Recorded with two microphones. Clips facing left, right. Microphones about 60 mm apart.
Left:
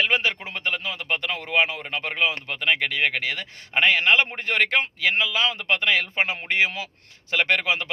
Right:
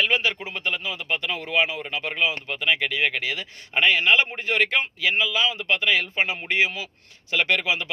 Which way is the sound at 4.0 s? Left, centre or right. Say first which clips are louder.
Even; left.